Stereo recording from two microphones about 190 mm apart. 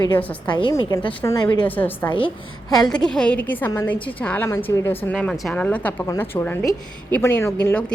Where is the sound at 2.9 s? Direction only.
5° left (ahead or behind).